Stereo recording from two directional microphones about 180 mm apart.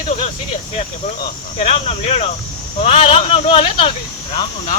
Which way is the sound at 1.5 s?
35° left (ahead or behind).